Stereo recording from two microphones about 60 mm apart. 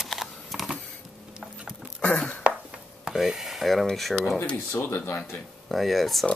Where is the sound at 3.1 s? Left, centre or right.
Centre.